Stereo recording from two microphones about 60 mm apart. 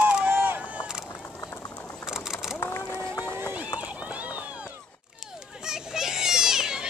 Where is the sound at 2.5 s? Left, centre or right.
Left.